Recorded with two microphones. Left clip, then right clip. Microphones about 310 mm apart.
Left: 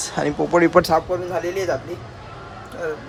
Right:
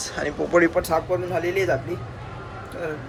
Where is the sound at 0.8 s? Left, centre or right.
Left.